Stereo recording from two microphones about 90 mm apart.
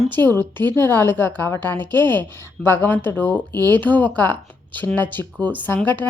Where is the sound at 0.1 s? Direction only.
20° left (ahead or behind).